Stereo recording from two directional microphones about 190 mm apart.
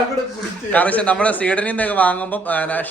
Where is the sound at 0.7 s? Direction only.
5° left (ahead or behind).